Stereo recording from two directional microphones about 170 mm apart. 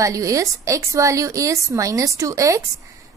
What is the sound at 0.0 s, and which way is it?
A woman's voice, 20° right (ahead or behind).